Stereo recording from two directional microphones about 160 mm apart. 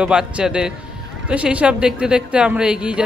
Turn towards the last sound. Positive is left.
turn(degrees=-5)  # may be behind; listen again after turning